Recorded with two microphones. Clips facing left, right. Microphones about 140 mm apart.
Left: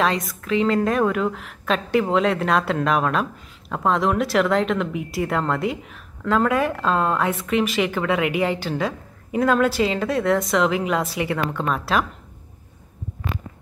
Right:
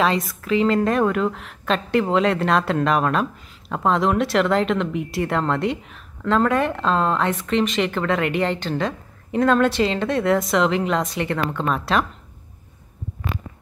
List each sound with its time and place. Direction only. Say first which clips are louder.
0.0 s a woman's voice: right 1 dB; centre (ahead or behind)